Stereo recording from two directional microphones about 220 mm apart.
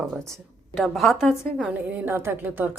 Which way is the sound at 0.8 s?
Centre (ahead or behind).